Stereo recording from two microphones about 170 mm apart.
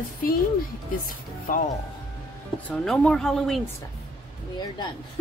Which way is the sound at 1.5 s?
55° left (ahead or behind).